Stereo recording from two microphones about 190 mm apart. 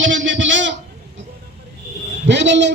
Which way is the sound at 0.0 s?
75° right (ahead or behind).